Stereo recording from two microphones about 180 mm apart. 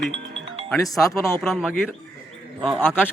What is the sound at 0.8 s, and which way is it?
Speech, 20° left (ahead or behind).